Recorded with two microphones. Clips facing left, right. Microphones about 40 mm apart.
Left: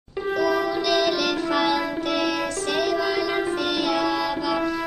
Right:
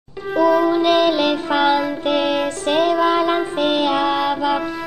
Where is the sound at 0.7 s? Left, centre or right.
Right.